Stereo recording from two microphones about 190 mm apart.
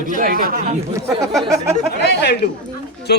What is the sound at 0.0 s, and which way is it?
Speech, 45° right (ahead or behind).